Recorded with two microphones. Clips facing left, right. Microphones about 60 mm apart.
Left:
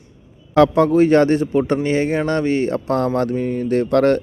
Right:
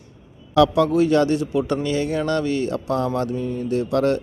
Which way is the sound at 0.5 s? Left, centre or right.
Left.